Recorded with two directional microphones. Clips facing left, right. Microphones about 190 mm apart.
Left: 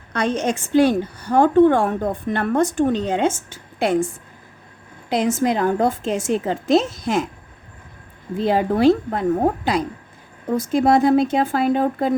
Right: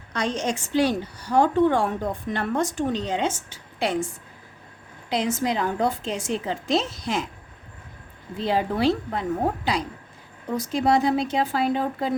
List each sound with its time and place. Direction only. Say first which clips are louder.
0.1 s a woman's voice: left 5 dB; 55° left (ahead or behind)
8.4 s a woman's voice: left 5 dB; 50° left (ahead or behind)